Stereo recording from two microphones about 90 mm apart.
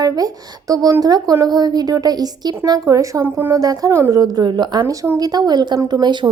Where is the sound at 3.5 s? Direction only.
40° right (ahead or behind).